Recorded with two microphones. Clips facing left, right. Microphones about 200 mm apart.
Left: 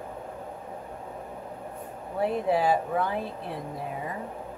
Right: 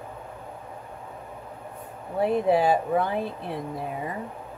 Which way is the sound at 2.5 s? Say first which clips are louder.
Right 2 dB; 25° right (ahead or behind).